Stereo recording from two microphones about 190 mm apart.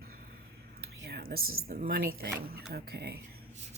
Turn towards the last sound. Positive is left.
turn(degrees=-55)  # may be behind; listen again after turning